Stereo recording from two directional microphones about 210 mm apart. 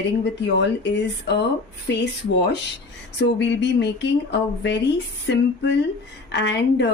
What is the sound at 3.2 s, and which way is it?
A woman's voice, 60° left (ahead or behind).